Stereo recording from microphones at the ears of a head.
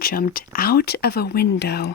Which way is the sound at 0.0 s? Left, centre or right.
Left.